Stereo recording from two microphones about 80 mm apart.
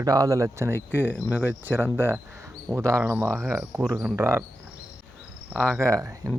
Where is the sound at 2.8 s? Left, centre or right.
Right.